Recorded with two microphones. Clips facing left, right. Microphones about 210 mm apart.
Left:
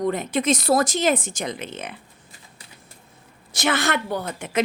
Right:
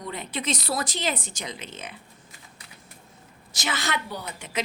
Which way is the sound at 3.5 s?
60° left (ahead or behind).